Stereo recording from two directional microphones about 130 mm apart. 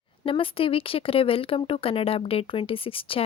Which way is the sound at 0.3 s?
45° left (ahead or behind).